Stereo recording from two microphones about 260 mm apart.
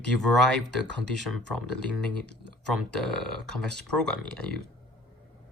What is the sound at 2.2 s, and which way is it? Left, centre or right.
Speech, right.